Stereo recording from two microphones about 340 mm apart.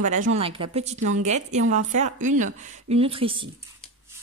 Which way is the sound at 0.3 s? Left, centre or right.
Centre.